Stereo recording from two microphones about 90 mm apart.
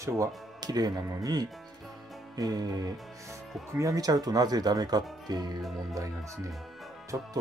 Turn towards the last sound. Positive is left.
turn(degrees=-25)  # may be behind; listen again after turning